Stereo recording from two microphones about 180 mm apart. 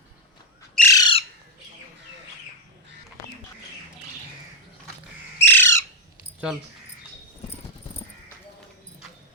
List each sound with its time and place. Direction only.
0.8 s bird: 20° left (ahead or behind)
5.4 s squawk: 10° left (ahead or behind)